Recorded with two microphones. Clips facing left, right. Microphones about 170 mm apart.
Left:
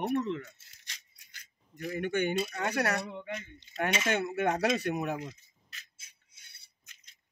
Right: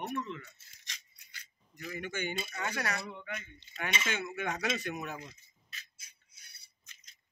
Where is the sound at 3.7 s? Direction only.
50° left (ahead or behind).